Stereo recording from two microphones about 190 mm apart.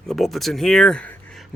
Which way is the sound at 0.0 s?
Centre (ahead or behind).